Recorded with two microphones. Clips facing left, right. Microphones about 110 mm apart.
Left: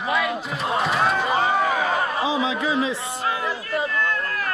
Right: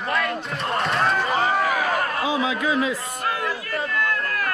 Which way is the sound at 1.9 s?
5° left (ahead or behind).